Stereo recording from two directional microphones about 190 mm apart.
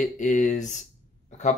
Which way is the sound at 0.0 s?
40° left (ahead or behind).